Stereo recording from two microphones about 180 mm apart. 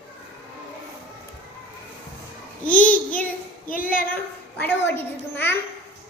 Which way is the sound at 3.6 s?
50° left (ahead or behind).